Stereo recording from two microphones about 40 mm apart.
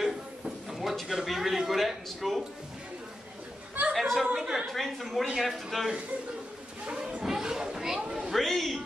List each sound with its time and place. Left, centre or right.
0.7 s a man's voice: centre
3.9 s a woman's voice: centre
4.6 s a woman's voice: centre
6.9 s speech: right
7.2 s speech: centre
8.3 s a woman's voice: centre